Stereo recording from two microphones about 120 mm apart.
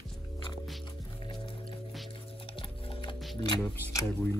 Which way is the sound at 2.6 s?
45° left (ahead or behind).